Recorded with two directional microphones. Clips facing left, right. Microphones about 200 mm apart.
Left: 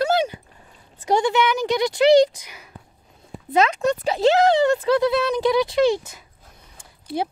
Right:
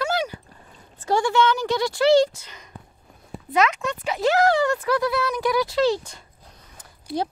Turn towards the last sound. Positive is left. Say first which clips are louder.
# even
turn(degrees=25)  # may be behind; listen again after turning